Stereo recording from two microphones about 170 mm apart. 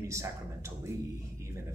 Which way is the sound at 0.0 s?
15° right (ahead or behind).